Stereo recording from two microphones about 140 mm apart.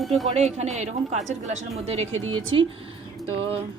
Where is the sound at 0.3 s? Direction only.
50° right (ahead or behind).